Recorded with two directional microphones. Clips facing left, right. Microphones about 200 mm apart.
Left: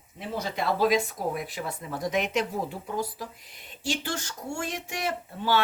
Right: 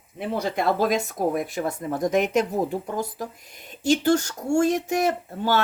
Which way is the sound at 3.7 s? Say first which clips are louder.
Right 12 dB; 40° right (ahead or behind).